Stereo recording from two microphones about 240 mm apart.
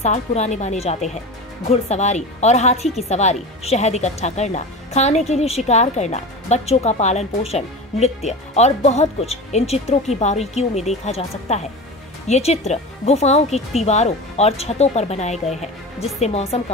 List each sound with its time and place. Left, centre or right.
0.0 s a woman's voice: left